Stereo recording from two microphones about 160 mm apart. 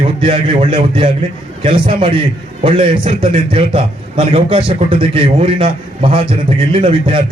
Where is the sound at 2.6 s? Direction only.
35° right (ahead or behind).